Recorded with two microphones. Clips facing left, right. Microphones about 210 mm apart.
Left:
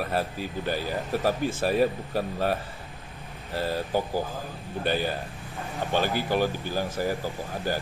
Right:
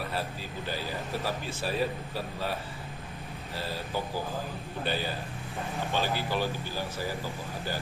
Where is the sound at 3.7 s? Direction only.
45° left (ahead or behind).